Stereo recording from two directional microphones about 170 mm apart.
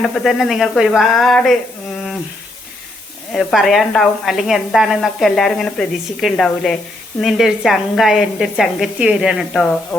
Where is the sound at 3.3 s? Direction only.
Centre (ahead or behind).